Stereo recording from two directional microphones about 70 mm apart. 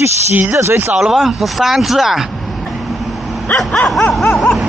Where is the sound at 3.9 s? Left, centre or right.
Centre.